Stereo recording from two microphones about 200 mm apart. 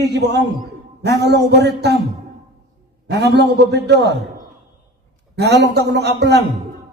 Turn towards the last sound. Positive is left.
turn(degrees=-55)  # may be behind; listen again after turning